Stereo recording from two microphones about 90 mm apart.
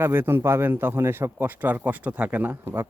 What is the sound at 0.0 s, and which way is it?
A man's voice, 25° right (ahead or behind).